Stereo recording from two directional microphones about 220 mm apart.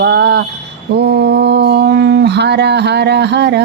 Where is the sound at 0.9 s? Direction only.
50° right (ahead or behind).